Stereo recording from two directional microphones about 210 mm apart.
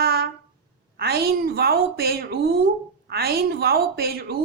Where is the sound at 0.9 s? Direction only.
50° right (ahead or behind).